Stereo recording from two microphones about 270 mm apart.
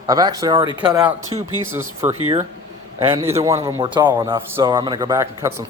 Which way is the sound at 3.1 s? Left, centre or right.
Centre.